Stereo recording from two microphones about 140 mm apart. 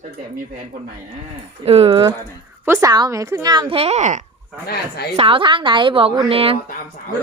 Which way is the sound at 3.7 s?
50° right (ahead or behind).